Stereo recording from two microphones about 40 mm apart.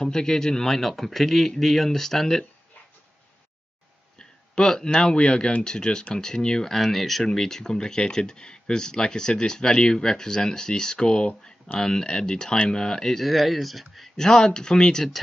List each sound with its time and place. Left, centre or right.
0.0 s a man's voice: centre
4.2 s speech: centre
6.8 s a man's voice: centre
14.1 s speech: centre